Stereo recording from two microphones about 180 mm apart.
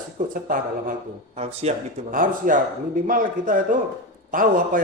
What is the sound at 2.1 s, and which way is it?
A man's voice, 50° right (ahead or behind).